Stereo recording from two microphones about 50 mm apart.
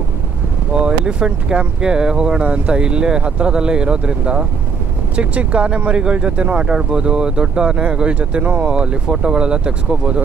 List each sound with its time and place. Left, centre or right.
0.7 s speech: centre